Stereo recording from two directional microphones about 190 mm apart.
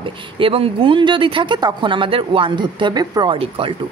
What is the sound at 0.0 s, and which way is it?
A woman's voice, 30° right (ahead or behind).